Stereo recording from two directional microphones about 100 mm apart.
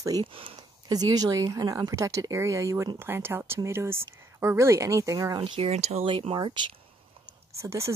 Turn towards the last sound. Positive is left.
turn(degrees=-25)  # may be behind; listen again after turning